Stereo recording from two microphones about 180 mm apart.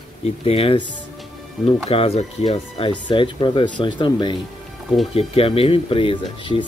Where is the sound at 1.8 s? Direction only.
35° left (ahead or behind).